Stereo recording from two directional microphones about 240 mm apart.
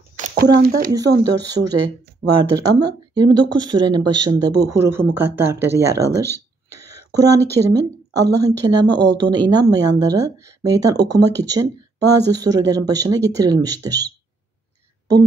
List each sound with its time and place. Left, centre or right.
0.3 s speech: right
0.9 s a woman's voice: centre